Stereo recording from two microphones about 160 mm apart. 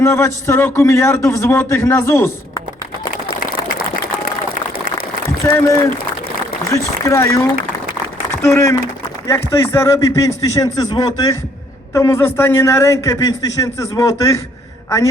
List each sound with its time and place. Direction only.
0.0 s a man's voice: 15° left (ahead or behind)
5.2 s a sound: 15° left (ahead or behind)
6.7 s a woman's voice: 15° left (ahead or behind)